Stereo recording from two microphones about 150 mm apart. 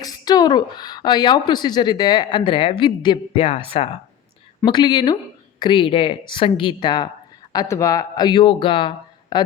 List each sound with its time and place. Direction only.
0.0 s a woman's voice: 25° left (ahead or behind)
4.6 s a woman's voice: 30° left (ahead or behind)